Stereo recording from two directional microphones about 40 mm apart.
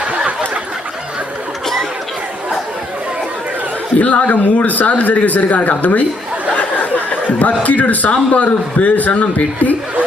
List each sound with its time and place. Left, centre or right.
4.0 s speech: left